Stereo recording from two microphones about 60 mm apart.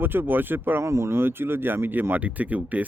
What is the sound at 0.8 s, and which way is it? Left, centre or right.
Speech, right.